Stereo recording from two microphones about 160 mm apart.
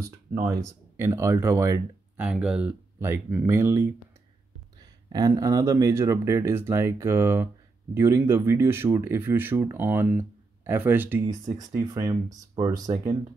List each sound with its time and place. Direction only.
0.3 s speech: 20° right (ahead or behind)
11.5 s speech: 25° right (ahead or behind)